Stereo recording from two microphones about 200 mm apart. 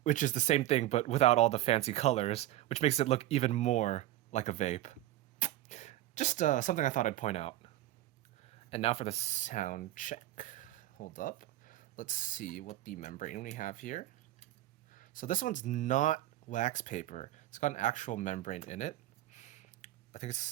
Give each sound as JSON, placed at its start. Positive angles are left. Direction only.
{"t": 0.0, "sound": "speech", "side_deg": 40}